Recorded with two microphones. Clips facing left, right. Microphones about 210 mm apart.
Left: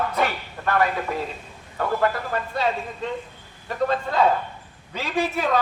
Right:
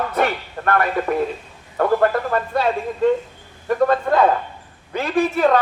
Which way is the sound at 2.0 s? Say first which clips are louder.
Right 5 dB; 55° right (ahead or behind).